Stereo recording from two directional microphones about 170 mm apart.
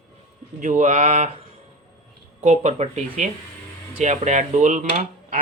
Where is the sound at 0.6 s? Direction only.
45° right (ahead or behind).